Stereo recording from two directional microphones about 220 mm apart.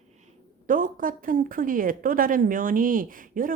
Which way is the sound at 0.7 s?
40° right (ahead or behind).